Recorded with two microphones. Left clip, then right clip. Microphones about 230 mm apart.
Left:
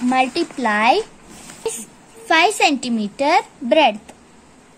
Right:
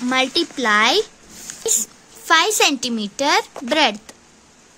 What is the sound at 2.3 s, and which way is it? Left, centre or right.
A woman's voice, right.